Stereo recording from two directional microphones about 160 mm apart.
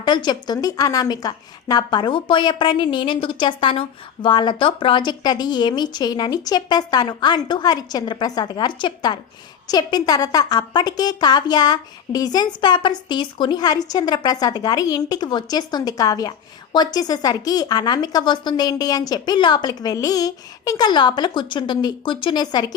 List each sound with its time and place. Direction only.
0.0 s a woman's voice: 25° left (ahead or behind)